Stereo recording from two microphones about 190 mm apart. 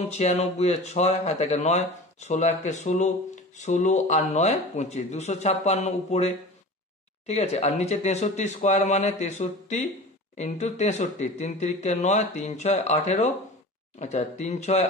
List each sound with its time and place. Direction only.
0.1 s speech: 35° left (ahead or behind)